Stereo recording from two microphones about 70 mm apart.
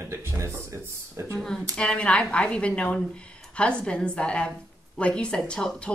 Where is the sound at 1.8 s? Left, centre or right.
Centre.